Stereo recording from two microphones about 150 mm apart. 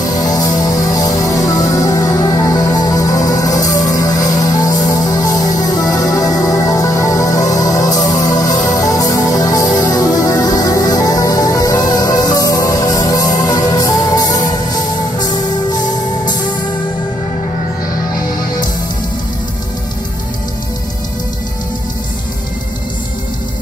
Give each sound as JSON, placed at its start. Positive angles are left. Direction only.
{"t": 0.0, "sound": "music", "side_deg": 25}